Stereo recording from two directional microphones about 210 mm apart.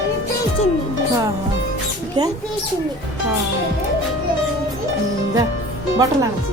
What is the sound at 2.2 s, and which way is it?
Speech, 20° right (ahead or behind).